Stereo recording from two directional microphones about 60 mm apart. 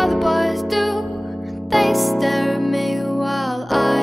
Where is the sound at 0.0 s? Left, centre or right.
Centre.